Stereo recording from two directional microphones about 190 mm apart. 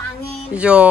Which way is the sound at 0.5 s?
5° right (ahead or behind).